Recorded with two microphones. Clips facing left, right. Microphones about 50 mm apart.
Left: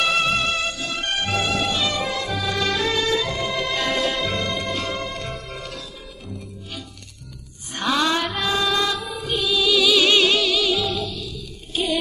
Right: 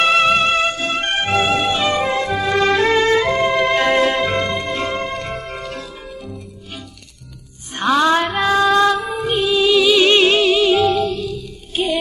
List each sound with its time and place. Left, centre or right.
0.0 s music: right
7.7 s music: right
8.4 s music: right
11.8 s music: right